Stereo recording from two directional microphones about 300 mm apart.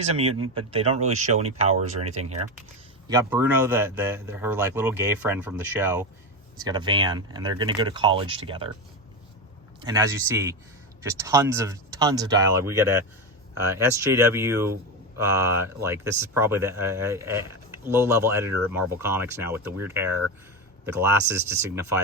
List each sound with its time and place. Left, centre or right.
0.0 s speech: centre
3.1 s speech: centre
9.8 s speech: centre